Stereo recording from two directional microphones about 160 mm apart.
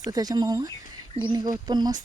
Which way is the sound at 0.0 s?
25° right (ahead or behind).